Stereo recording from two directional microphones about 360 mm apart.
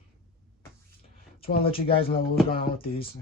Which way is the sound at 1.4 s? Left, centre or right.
Centre.